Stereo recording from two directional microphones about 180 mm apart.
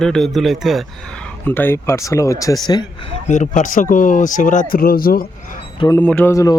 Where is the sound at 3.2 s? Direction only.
45° left (ahead or behind).